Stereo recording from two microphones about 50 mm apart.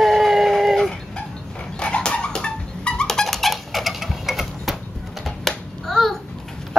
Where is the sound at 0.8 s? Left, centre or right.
Left; by 5.5 s centre.